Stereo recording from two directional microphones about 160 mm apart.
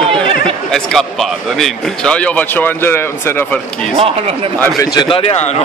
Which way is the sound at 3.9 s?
35° right (ahead or behind).